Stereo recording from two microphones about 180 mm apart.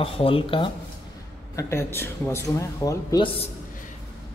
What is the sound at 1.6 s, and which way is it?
A man's voice, 15° left (ahead or behind).